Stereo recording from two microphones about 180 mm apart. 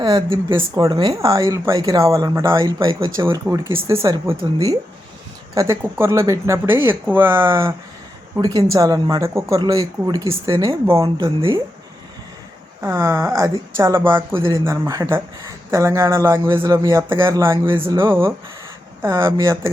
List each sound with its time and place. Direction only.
0.0 s speech: 25° right (ahead or behind)
5.5 s speech: 15° right (ahead or behind)
11.2 s speech: 25° right (ahead or behind)
12.8 s speech: 15° right (ahead or behind)